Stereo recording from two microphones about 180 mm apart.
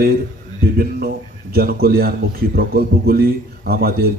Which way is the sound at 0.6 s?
60° right (ahead or behind).